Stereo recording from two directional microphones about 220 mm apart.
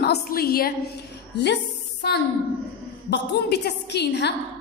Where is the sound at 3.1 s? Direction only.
50° left (ahead or behind).